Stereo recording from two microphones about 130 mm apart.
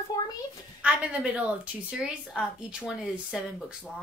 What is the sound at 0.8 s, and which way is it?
Speech, 5° right (ahead or behind).